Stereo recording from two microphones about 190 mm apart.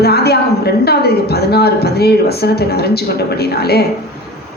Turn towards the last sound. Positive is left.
turn(degrees=55)  # may be behind; listen again after turning